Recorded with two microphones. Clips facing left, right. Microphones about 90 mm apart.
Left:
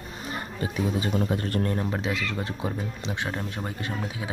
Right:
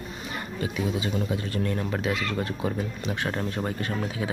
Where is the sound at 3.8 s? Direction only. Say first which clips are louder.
Right 3 dB; 15° left (ahead or behind).